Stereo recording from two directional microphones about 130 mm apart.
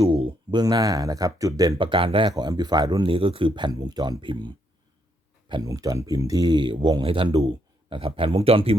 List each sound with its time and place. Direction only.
0.0 s a sound: 45° right (ahead or behind)
0.6 s speech: 30° right (ahead or behind)
2.3 s speech: 30° right (ahead or behind)
5.6 s speech: 25° right (ahead or behind); by 8.8 s 50° right (ahead or behind)